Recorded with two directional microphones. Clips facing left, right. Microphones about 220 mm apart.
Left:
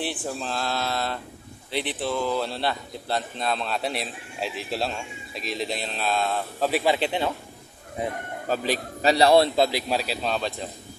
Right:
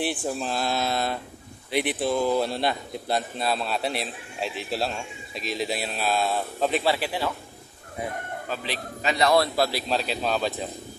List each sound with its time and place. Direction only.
0.0 s a man's voice: 15° right (ahead or behind)
6.7 s a man's voice: 15° left (ahead or behind)
8.5 s a man's voice: 45° left (ahead or behind); by 10.1 s 10° left (ahead or behind)
10.2 s speech: 5° right (ahead or behind)